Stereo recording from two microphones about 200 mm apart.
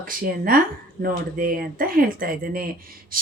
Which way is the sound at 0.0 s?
45° right (ahead or behind).